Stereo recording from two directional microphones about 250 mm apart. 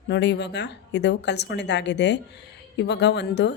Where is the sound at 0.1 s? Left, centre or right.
Left.